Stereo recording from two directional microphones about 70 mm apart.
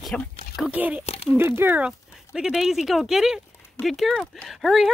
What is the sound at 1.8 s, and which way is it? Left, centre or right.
Speech, centre.